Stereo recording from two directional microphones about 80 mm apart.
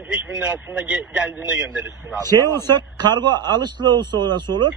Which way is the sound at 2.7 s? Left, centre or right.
Right.